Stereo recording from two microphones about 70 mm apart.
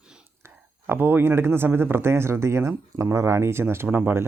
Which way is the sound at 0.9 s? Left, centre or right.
Right.